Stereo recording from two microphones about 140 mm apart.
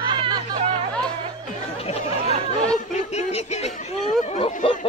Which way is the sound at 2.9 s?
55° left (ahead or behind).